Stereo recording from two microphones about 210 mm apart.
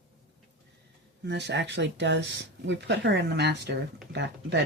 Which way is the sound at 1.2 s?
55° right (ahead or behind).